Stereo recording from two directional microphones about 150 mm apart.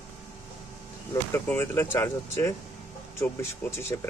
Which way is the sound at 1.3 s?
15° left (ahead or behind).